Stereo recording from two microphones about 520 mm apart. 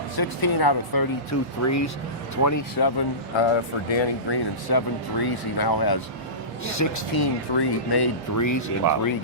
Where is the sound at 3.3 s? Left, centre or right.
Left.